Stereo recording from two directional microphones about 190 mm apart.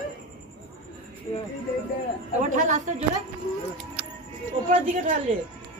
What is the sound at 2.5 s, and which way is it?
Speech, 40° right (ahead or behind).